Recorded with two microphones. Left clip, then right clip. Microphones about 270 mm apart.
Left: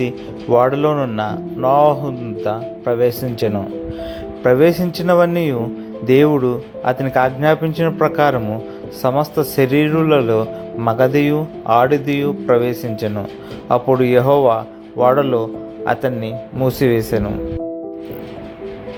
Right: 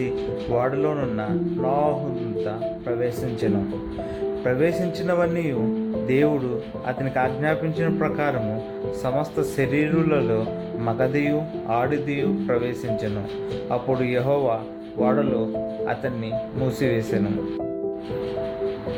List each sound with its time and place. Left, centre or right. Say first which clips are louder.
0.5 s a man's voice: left 10 dB; centre